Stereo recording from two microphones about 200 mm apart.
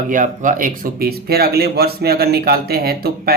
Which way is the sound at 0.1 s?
40° right (ahead or behind).